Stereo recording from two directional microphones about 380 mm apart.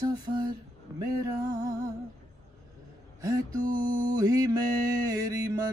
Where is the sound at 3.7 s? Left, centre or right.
Centre.